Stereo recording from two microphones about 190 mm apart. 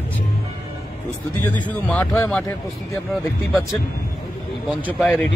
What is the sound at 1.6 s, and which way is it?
Speech, 5° left (ahead or behind).